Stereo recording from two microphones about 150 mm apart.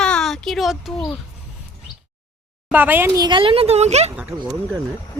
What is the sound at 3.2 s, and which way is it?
Speech, 35° right (ahead or behind).